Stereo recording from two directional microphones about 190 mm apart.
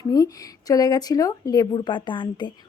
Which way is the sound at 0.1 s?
20° left (ahead or behind).